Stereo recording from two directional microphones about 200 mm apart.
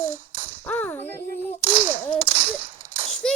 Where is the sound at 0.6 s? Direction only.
10° left (ahead or behind).